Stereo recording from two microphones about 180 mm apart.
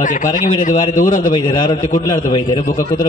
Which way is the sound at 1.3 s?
25° left (ahead or behind).